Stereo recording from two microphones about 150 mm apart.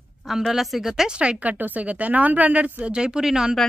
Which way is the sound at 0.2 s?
Centre (ahead or behind).